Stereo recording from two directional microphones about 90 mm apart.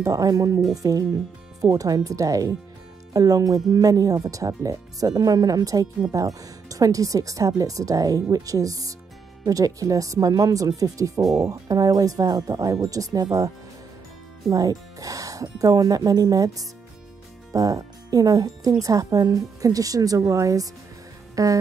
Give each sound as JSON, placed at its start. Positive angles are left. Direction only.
{"t": 0.0, "sound": "speech", "side_deg": -40}
{"t": 14.5, "sound": "speech", "side_deg": -40}